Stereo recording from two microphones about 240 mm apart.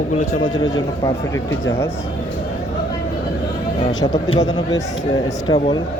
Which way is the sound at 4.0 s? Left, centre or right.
Centre.